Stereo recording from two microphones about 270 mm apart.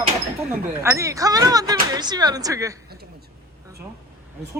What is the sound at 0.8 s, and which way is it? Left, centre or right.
Speech, centre.